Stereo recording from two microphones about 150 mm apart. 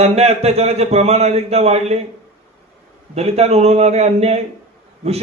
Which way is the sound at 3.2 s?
45° right (ahead or behind).